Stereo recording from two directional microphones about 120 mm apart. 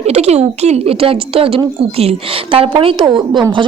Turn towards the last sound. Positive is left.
turn(degrees=-45)  # may be behind; listen again after turning